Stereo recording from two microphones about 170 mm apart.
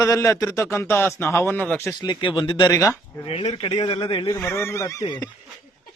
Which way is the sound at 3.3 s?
35° left (ahead or behind).